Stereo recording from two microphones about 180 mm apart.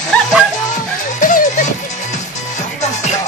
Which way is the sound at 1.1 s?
45° left (ahead or behind).